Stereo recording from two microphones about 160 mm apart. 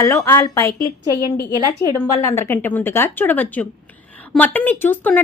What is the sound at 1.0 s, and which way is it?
Speech, 20° right (ahead or behind).